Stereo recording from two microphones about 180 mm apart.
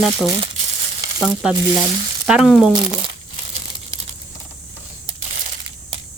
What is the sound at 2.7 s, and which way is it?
Speech, 30° right (ahead or behind).